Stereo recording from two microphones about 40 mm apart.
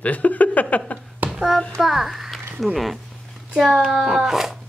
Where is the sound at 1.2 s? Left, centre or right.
Right.